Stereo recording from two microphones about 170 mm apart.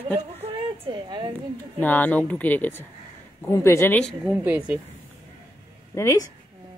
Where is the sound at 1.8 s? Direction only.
10° left (ahead or behind).